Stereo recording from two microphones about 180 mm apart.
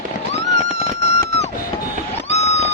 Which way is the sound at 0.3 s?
40° left (ahead or behind).